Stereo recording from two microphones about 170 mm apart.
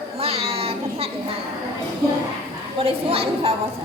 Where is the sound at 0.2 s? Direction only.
35° right (ahead or behind).